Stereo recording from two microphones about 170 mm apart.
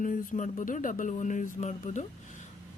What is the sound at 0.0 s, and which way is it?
Speech, 50° left (ahead or behind).